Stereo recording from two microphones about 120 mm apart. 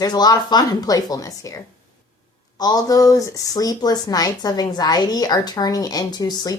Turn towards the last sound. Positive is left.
turn(degrees=35)  # may be behind; listen again after turning